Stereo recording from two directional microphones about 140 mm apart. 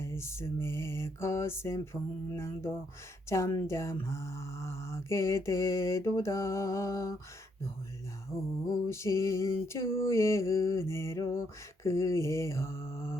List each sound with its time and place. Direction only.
0.0 s mantra: 20° left (ahead or behind)
8.6 s mantra: 25° left (ahead or behind)